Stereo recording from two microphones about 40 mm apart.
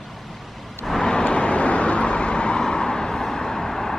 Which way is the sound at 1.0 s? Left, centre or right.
Left.